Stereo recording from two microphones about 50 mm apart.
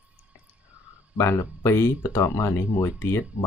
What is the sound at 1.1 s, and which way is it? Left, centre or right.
Speech, left.